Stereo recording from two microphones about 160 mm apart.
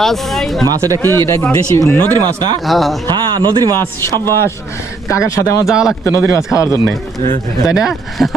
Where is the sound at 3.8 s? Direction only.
15° left (ahead or behind).